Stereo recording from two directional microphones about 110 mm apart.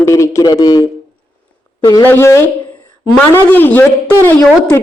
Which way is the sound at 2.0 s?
20° left (ahead or behind).